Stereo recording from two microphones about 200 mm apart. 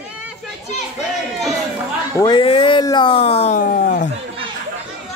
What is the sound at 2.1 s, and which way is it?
Speech, 20° left (ahead or behind).